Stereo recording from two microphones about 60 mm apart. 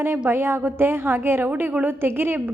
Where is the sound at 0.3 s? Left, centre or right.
Right.